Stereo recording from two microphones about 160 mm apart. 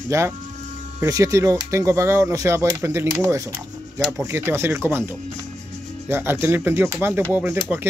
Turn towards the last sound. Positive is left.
turn(degrees=-15)  # may be behind; listen again after turning